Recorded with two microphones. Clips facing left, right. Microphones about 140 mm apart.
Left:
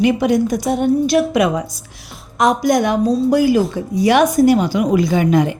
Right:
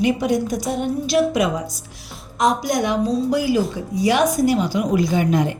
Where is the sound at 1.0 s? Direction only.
55° left (ahead or behind); by 5.4 s 90° left.